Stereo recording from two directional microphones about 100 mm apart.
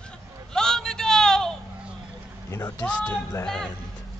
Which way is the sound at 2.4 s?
35° left (ahead or behind).